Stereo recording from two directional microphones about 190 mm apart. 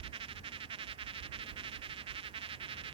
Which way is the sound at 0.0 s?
30° right (ahead or behind).